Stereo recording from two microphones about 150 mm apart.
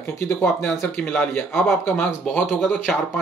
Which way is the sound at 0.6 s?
5° left (ahead or behind).